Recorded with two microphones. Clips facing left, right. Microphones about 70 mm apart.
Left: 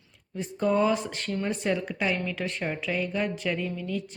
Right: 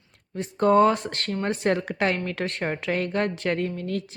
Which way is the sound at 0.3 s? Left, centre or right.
Right.